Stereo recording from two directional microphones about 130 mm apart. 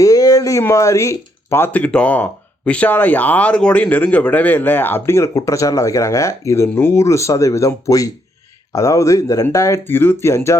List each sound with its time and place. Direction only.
0.0 s speech: 25° left (ahead or behind)